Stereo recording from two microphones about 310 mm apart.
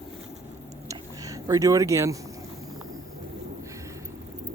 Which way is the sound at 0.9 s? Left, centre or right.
Centre.